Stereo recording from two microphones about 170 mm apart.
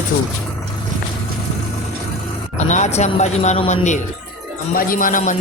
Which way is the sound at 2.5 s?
45° left (ahead or behind).